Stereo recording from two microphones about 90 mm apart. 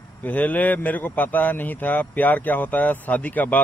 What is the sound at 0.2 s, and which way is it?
Speech, 20° left (ahead or behind).